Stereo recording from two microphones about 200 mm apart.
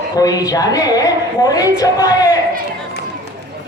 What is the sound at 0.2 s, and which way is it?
A woman's voice, 20° left (ahead or behind).